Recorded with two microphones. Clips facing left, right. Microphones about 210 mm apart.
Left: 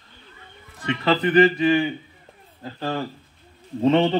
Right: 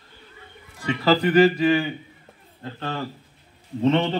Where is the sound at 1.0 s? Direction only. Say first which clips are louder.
Right 1 dB; 5° right (ahead or behind).